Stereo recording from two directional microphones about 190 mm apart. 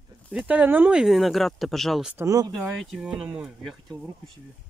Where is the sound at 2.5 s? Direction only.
Centre (ahead or behind).